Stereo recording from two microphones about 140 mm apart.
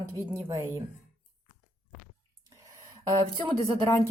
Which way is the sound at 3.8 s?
20° left (ahead or behind).